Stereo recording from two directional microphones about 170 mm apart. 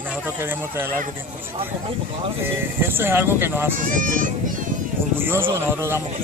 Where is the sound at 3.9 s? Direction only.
50° right (ahead or behind).